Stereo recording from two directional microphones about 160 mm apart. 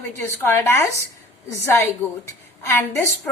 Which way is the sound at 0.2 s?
15° left (ahead or behind).